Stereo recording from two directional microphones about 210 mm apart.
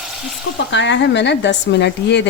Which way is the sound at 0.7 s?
60° left (ahead or behind).